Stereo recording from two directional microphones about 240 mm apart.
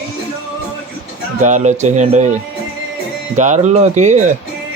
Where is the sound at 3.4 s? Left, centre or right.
Right.